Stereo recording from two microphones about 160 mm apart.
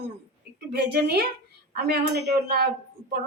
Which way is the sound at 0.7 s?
90° right.